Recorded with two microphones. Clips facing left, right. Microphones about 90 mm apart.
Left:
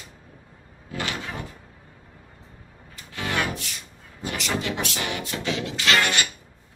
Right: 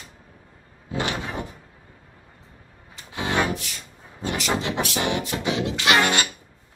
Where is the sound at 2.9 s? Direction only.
20° right (ahead or behind).